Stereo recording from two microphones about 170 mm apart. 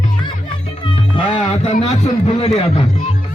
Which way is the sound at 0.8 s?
30° left (ahead or behind).